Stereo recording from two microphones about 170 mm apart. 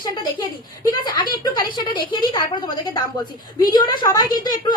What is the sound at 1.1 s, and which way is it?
Speech, 25° left (ahead or behind).